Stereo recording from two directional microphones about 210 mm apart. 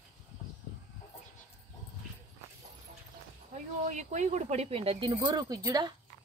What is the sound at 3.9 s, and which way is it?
Speech, 35° right (ahead or behind).